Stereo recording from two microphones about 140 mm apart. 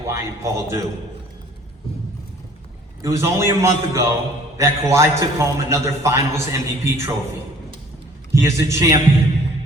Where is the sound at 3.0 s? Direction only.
20° right (ahead or behind).